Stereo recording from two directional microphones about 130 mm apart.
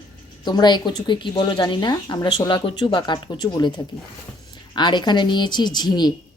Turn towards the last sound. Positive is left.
turn(degrees=30)  # may be behind; listen again after turning